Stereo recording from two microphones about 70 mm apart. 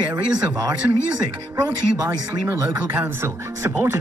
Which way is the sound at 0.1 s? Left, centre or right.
Right.